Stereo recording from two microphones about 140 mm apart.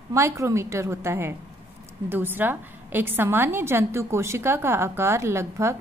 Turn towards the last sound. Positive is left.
turn(degrees=-20)  # may be behind; listen again after turning